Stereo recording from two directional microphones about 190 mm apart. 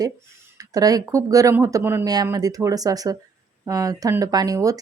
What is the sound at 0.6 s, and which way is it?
A woman's voice, 20° right (ahead or behind).